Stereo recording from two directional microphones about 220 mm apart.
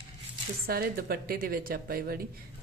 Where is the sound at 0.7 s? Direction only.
45° right (ahead or behind).